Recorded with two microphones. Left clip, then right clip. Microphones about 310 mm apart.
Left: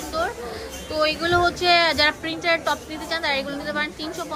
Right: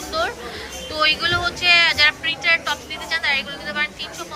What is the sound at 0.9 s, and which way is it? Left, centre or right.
A woman's voice, centre.